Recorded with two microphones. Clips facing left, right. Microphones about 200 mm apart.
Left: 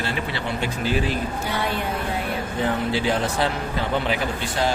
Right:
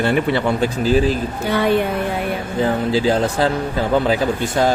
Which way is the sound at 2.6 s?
35° right (ahead or behind).